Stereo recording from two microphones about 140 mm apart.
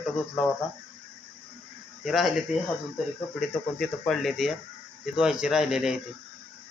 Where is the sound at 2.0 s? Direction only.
Centre (ahead or behind).